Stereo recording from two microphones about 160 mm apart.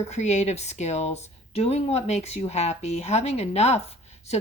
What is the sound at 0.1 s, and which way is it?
Speech, 45° left (ahead or behind).